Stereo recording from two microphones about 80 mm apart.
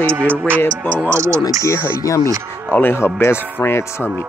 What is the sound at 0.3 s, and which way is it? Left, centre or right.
Speech, right.